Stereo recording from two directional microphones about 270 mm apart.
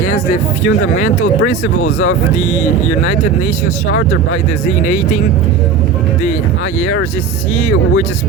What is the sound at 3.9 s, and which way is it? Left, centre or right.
Speech, left.